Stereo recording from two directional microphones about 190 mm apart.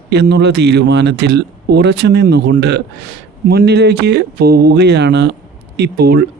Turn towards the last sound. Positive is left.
turn(degrees=-60)  # may be behind; listen again after turning